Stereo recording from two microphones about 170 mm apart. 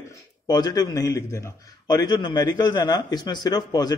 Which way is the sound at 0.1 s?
20° left (ahead or behind).